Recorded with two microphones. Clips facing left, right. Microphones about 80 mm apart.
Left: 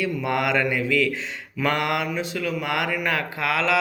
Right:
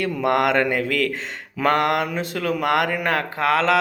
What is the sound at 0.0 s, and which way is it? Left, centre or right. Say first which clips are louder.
Speech: right 4 dB; right.